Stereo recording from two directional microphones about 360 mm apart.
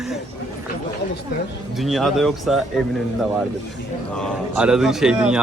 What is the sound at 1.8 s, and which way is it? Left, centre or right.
Speech, centre.